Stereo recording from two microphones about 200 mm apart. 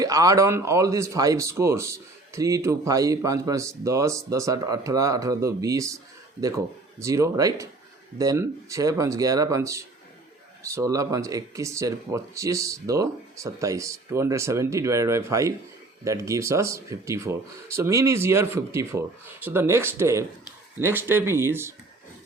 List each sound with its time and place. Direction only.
0.0 s speech: 15° right (ahead or behind)
7.0 s speech: 15° right (ahead or behind)